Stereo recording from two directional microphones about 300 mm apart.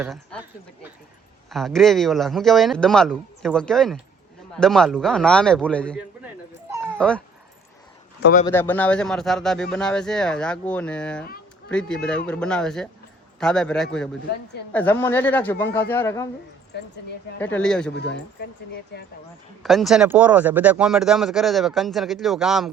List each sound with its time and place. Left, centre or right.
0.0 s speech: centre
1.5 s speech: centre
8.2 s speech: left
8.4 s speech: centre
16.7 s speech: left
17.4 s speech: centre
17.9 s speech: left
19.6 s speech: centre